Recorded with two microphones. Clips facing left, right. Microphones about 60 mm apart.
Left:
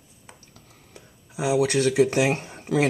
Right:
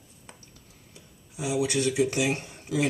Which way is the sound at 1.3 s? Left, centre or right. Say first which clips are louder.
Left 5 dB; left.